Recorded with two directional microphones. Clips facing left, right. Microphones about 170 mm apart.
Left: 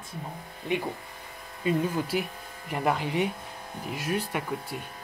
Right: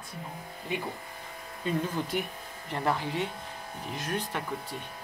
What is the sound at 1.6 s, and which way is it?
Speech, 5° left (ahead or behind).